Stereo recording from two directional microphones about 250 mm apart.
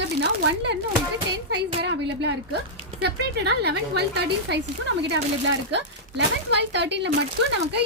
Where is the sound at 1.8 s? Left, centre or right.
Right.